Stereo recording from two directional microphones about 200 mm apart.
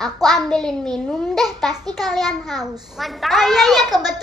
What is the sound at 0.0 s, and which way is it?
A child's voice, centre (ahead or behind).